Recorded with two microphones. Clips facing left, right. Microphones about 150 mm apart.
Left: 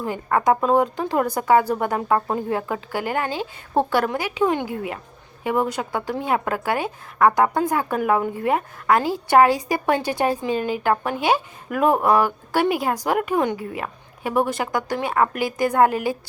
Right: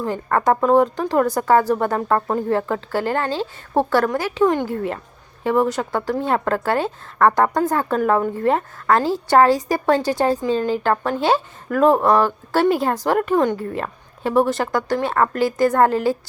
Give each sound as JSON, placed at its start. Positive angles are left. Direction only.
{"t": 0.0, "sound": "a woman's voice", "side_deg": 15}